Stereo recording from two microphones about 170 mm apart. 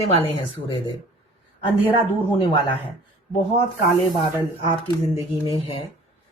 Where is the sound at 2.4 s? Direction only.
30° left (ahead or behind).